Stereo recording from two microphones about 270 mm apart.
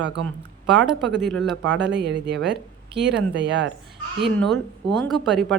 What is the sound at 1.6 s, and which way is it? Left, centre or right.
Speech, right.